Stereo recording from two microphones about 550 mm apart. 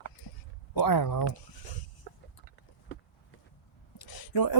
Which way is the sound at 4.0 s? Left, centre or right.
Left.